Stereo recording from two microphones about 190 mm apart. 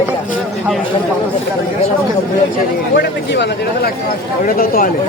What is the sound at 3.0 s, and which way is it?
Speech, 60° left (ahead or behind).